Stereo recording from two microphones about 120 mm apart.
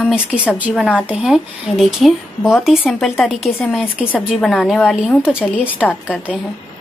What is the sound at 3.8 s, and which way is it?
Speech, 15° left (ahead or behind).